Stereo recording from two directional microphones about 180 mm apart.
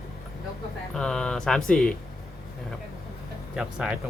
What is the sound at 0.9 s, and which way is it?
Speech, 5° left (ahead or behind).